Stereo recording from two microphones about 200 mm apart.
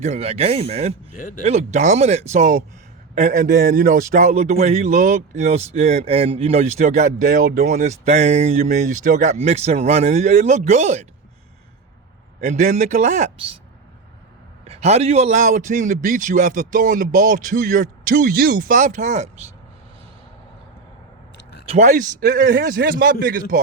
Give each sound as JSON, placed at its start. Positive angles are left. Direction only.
{"t": 0.0, "sound": "a man's voice", "side_deg": -30}
{"t": 1.1, "sound": "speech", "side_deg": 40}
{"t": 1.5, "sound": "a man's voice", "side_deg": -35}
{"t": 12.5, "sound": "a man's voice", "side_deg": -35}
{"t": 14.6, "sound": "a man's voice", "side_deg": -30}
{"t": 21.7, "sound": "a man's voice", "side_deg": -35}
{"t": 22.4, "sound": "a man's voice", "side_deg": -50}